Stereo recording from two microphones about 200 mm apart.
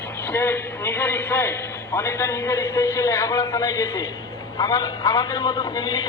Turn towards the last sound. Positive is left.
turn(degrees=20)  # may be behind; listen again after turning